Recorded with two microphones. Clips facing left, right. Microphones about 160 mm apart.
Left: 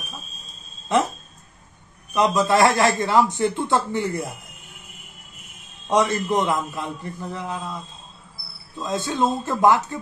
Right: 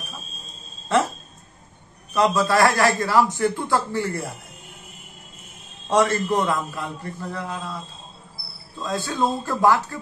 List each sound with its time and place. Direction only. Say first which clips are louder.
0.9 s speech: even; 15° left (ahead or behind)
2.1 s a man's voice: left 1 dB; 20° left (ahead or behind)
5.9 s a man's voice: right 1 dB; 15° left (ahead or behind)
8.7 s a man's voice: left 1 dB; 20° left (ahead or behind)